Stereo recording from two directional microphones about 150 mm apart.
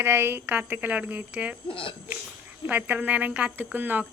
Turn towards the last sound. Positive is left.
turn(degrees=-10)  # may be behind; listen again after turning